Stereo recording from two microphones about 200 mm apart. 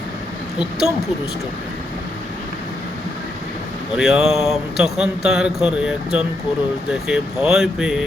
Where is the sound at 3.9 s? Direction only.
Centre (ahead or behind).